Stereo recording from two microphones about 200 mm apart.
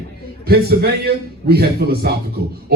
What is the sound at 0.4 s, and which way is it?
Speech, 50° right (ahead or behind).